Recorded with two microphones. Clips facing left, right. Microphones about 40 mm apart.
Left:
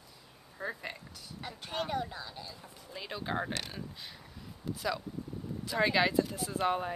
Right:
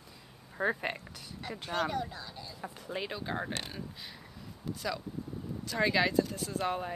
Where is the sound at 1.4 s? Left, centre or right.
Centre.